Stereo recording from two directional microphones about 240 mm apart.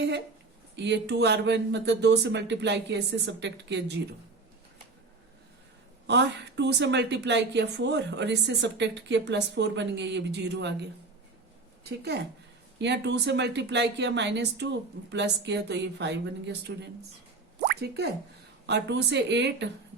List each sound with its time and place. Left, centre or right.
0.8 s a woman's voice: right
6.1 s a woman's voice: right